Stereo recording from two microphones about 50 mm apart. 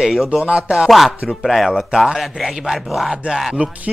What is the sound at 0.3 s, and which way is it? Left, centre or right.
Speech, centre.